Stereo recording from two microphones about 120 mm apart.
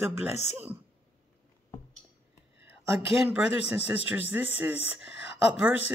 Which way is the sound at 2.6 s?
15° right (ahead or behind).